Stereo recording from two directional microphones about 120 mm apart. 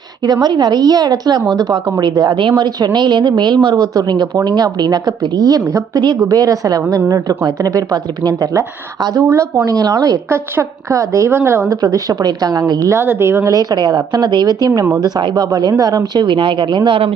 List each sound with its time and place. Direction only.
0.3 s a woman's voice: 35° right (ahead or behind)
11.8 s a woman's voice: 30° right (ahead or behind)